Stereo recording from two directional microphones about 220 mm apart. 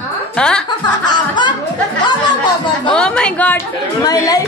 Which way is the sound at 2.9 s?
5° left (ahead or behind).